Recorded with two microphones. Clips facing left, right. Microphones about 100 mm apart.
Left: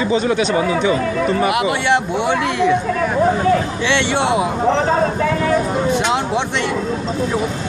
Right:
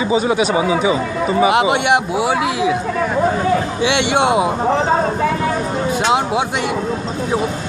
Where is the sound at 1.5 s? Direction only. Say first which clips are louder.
Right 2 dB; 20° right (ahead or behind); by 2.8 s 5° right (ahead or behind).